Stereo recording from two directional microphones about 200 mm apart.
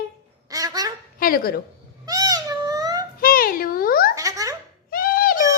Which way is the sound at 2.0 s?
20° right (ahead or behind).